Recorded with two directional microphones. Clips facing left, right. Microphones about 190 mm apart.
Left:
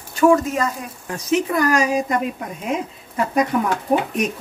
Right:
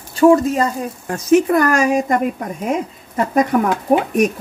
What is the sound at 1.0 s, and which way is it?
Speech, 45° right (ahead or behind).